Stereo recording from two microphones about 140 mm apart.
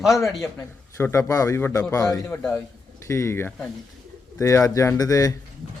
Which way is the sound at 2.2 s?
10° left (ahead or behind).